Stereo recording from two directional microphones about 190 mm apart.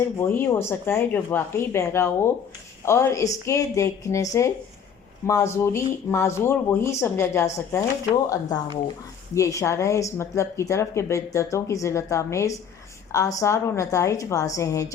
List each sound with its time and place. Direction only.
0.2 s speech: 15° left (ahead or behind)